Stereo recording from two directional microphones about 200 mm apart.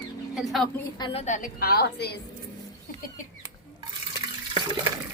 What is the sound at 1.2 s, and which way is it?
Speech, 40° left (ahead or behind).